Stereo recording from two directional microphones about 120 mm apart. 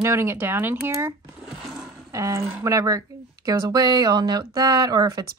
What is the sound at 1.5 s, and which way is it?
Roaring cats, 5° right (ahead or behind).